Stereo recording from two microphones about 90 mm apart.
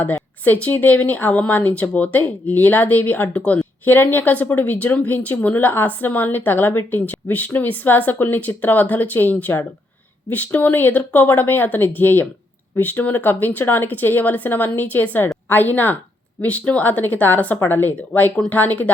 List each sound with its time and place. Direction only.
0.0 s a woman's voice: 20° left (ahead or behind)